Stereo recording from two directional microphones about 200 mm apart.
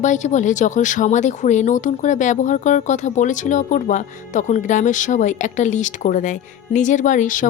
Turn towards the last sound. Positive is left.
turn(degrees=40)  # may be behind; listen again after turning